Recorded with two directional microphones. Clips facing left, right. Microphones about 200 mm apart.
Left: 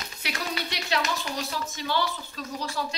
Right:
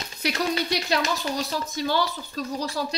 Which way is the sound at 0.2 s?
40° right (ahead or behind).